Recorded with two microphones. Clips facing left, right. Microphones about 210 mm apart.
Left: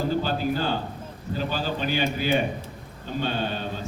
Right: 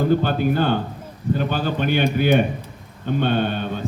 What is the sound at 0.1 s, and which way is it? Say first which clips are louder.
A man's voice: right 6 dB; 60° right (ahead or behind).